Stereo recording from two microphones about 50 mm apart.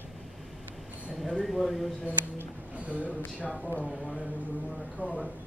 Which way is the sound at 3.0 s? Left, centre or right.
Left.